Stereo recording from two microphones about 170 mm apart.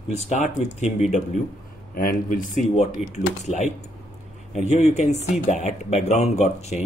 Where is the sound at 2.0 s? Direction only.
55° left (ahead or behind).